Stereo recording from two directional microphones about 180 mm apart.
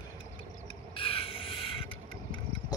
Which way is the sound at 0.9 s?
30° left (ahead or behind).